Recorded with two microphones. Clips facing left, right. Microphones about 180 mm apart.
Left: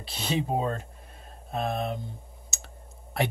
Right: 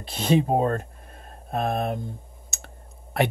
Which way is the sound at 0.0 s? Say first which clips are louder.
Right 8 dB; 50° right (ahead or behind).